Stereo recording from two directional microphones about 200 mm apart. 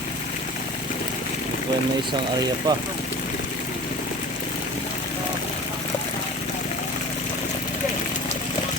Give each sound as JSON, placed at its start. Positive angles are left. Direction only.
{"t": 2.7, "sound": "speech", "side_deg": -20}